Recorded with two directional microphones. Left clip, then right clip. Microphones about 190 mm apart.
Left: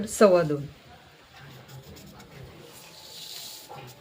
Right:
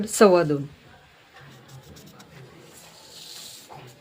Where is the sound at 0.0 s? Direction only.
45° right (ahead or behind).